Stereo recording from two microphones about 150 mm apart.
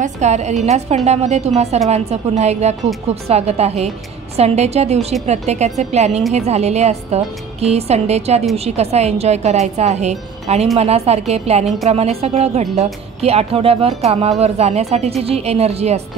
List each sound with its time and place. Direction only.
0.0 s a woman's voice: 50° right (ahead or behind)